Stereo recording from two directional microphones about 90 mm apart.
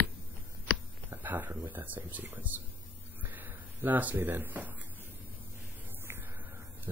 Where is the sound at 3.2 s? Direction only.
20° right (ahead or behind).